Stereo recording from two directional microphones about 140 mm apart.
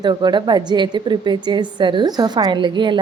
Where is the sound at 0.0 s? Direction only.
30° right (ahead or behind).